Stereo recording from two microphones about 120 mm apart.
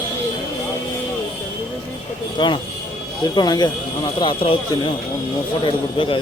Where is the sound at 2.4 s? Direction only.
40° left (ahead or behind).